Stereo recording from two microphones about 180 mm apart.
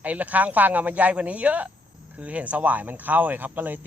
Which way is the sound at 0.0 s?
10° right (ahead or behind).